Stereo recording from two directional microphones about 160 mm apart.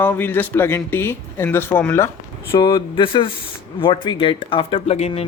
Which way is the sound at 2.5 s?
25° left (ahead or behind).